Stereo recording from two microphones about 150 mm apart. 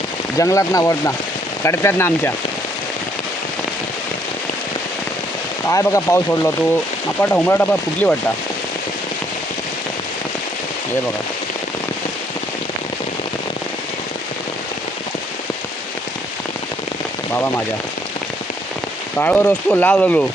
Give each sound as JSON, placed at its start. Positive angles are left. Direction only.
{"t": 0.3, "sound": "speech", "side_deg": 20}
{"t": 5.6, "sound": "speech", "side_deg": 20}
{"t": 19.1, "sound": "speech", "side_deg": 10}